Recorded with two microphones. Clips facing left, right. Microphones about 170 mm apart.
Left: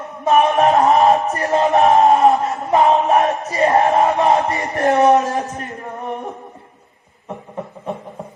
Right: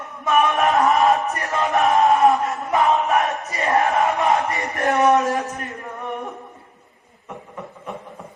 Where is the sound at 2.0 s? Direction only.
30° left (ahead or behind).